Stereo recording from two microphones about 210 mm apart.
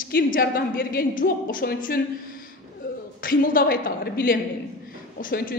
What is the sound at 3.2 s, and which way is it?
A woman's voice, 40° left (ahead or behind).